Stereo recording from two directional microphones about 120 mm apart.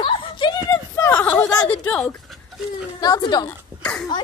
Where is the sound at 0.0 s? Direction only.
45° left (ahead or behind).